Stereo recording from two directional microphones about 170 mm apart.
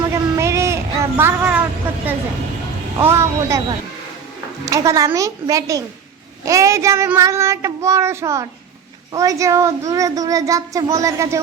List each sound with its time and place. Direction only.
0.1 s a sound: 15° right (ahead or behind)
3.0 s speech: 15° right (ahead or behind)
4.6 s a child's voice: 20° right (ahead or behind)